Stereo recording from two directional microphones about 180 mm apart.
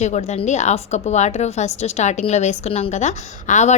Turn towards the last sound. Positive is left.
turn(degrees=40)  # may be behind; listen again after turning